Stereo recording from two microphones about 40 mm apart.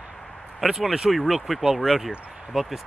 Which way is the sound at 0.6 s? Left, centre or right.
Centre.